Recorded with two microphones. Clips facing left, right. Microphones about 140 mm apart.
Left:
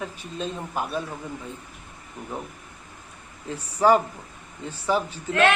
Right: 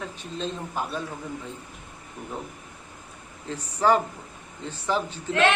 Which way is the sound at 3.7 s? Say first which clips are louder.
Left 3 dB; 10° left (ahead or behind).